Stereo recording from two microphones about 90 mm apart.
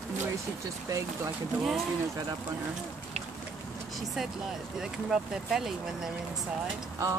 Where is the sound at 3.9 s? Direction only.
Centre (ahead or behind).